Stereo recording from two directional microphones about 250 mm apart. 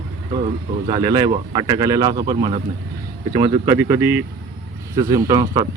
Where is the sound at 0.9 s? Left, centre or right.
Centre.